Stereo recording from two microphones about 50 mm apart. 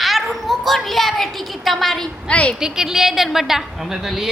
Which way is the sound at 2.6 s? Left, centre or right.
Centre.